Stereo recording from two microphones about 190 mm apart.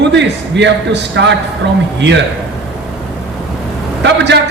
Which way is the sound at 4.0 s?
65° right (ahead or behind).